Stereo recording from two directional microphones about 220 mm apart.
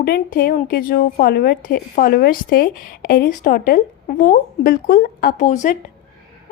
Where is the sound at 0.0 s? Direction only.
45° left (ahead or behind).